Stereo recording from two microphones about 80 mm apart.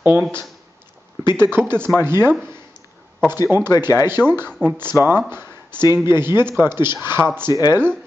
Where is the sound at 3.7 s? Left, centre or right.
Left.